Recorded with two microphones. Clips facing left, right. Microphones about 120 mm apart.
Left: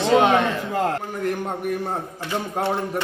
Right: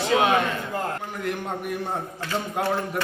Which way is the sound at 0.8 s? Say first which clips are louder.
Left 9 dB; 90° left.